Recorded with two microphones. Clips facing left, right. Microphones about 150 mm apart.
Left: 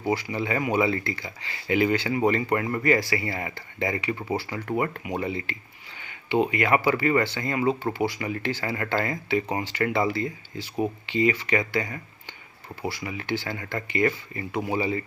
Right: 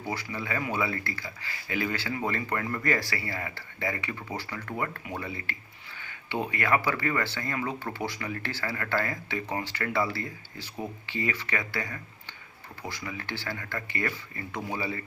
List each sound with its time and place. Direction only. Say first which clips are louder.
0.0 s speech: left 8 dB; 15° left (ahead or behind)
7.9 s speech: left 6 dB; 10° left (ahead or behind)